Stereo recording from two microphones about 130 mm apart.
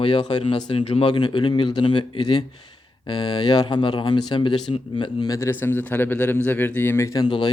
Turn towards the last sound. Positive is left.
turn(degrees=40)  # may be behind; listen again after turning